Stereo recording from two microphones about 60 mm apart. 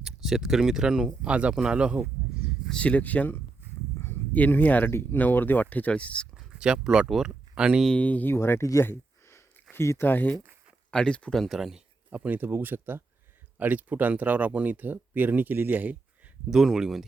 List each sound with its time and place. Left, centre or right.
0.0 s speech: centre
2.8 s speech: left
6.3 s speech: centre
7.9 s speech: left
8.3 s speech: left
8.8 s a sound: left
9.7 s speech: left
10.1 s speech: left
10.9 s speech: centre
11.3 s speech: centre
12.1 s speech: right
16.5 s speech: centre